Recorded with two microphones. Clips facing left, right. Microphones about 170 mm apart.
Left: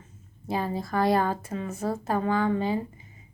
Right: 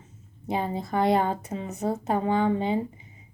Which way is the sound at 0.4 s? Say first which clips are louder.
Right 1 dB; 20° right (ahead or behind).